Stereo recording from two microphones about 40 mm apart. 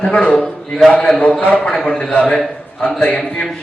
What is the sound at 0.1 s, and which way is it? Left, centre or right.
Speech, left.